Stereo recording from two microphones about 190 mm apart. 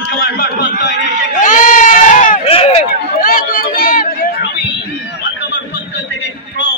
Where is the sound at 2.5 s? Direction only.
30° left (ahead or behind).